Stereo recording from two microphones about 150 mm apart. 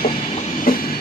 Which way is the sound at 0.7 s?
80° left.